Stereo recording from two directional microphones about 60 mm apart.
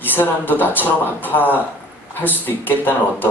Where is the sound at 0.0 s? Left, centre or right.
Left.